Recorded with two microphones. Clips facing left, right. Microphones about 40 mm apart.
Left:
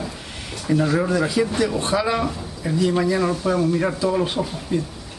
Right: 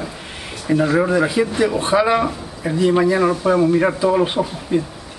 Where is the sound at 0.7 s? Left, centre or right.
Centre.